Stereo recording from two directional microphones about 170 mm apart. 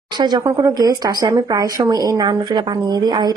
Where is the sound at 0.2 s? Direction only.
25° right (ahead or behind).